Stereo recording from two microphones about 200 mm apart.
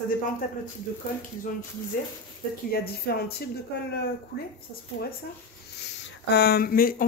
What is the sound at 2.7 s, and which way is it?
Speech, 50° left (ahead or behind).